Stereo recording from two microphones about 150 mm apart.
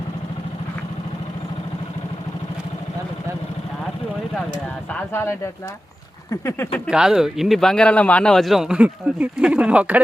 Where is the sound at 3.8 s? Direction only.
Centre (ahead or behind).